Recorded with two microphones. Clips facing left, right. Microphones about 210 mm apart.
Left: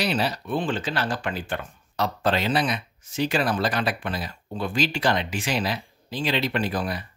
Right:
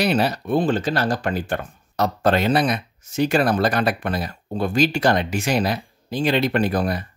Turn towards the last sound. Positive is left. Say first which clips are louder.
# right 6 dB
turn(degrees=-45)  # may be behind; listen again after turning